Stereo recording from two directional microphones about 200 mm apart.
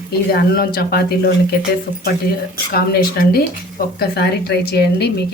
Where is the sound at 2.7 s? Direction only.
50° left (ahead or behind).